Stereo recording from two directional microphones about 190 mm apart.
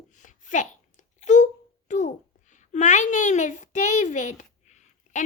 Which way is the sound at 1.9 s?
40° left (ahead or behind).